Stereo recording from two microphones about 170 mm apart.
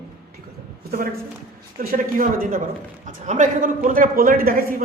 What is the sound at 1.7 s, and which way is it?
A woman's voice, 55° right (ahead or behind).